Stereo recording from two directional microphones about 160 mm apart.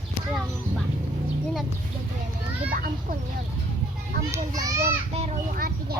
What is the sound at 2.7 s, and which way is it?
Children playing, 60° right (ahead or behind).